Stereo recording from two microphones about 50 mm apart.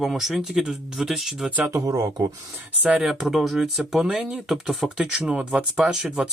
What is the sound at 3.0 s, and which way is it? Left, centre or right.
Speech, centre.